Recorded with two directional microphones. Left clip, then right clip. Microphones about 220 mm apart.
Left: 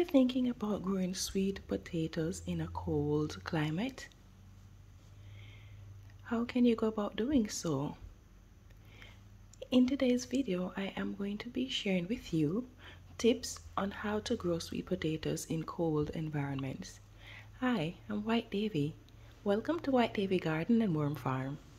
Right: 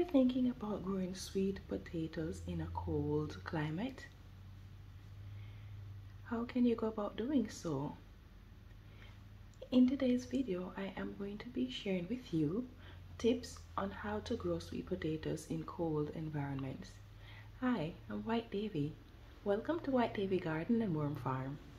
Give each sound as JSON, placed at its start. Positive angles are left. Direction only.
{"t": 0.0, "sound": "speech", "side_deg": 45}
{"t": 6.2, "sound": "speech", "side_deg": 45}
{"t": 9.6, "sound": "speech", "side_deg": 45}